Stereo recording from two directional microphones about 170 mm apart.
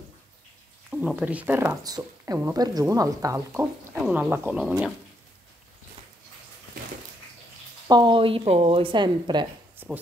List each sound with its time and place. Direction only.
0.8 s speech: 10° right (ahead or behind)
7.9 s a woman's voice: 30° right (ahead or behind)
9.8 s a sound: 10° right (ahead or behind)